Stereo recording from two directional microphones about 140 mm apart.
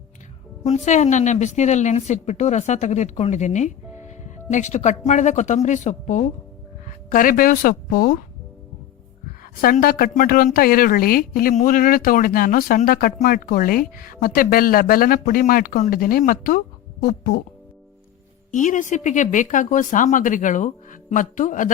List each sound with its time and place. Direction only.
0.6 s speech: 55° left (ahead or behind)
6.8 s speech: 75° left (ahead or behind)
9.4 s a woman's voice: 90° left
18.5 s speech: 65° left (ahead or behind)